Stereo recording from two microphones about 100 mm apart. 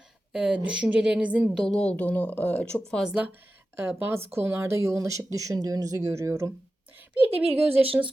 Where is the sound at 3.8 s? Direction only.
25° right (ahead or behind).